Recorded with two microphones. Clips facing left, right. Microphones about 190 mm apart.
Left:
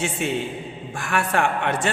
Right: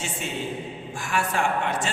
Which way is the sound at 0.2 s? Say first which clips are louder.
Left 5 dB; 60° left (ahead or behind).